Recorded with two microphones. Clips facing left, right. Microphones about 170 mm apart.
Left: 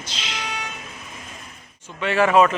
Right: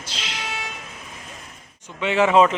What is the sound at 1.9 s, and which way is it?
Speech, 20° right (ahead or behind).